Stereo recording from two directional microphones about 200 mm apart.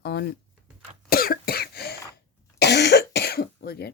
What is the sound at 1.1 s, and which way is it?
Cough, 50° left (ahead or behind).